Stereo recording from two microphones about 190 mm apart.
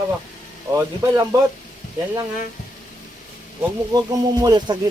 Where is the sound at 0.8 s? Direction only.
20° right (ahead or behind).